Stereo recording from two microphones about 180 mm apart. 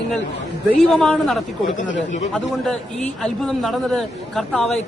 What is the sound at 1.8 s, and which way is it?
Speech, 45° left (ahead or behind).